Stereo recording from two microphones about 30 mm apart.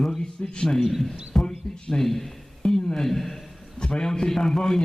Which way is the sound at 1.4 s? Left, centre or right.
Left.